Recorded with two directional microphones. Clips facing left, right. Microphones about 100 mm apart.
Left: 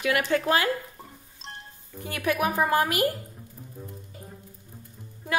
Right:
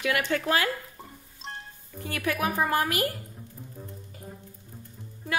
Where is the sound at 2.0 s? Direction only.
20° left (ahead or behind).